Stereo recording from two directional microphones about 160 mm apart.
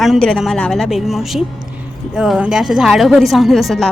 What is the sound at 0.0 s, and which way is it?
A woman's voice, centre (ahead or behind).